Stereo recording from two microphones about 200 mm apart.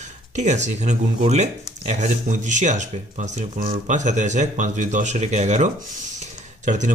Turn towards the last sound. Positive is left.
turn(degrees=-35)  # may be behind; listen again after turning